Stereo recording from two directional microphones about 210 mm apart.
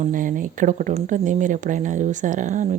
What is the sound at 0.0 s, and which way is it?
Speech, 40° right (ahead or behind).